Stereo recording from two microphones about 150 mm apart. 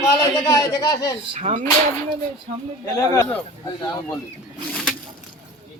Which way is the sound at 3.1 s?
20° left (ahead or behind).